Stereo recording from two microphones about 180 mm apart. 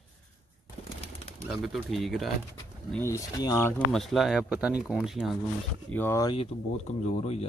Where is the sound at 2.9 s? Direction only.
15° left (ahead or behind).